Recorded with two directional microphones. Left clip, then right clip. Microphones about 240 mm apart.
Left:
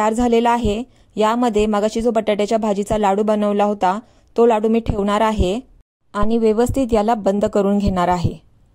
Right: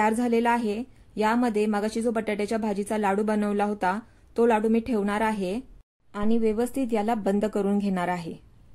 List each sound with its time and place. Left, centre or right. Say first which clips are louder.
0.0 s a woman's voice: left 7 dB; left